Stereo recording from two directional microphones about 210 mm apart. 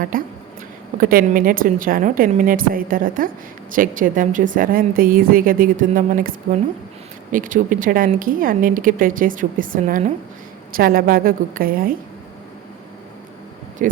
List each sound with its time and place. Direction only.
0.1 s a woman's voice: 40° right (ahead or behind)